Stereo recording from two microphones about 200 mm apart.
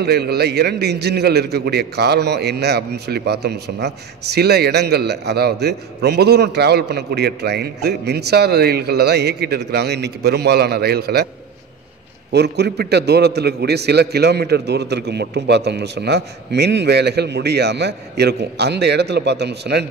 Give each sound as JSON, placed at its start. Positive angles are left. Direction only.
{"t": 0.0, "sound": "a man's voice", "side_deg": -55}
{"t": 12.3, "sound": "a man's voice", "side_deg": -55}